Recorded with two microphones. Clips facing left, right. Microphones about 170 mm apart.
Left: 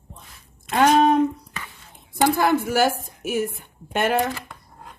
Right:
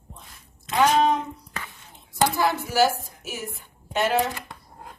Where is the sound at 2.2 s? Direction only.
55° left (ahead or behind).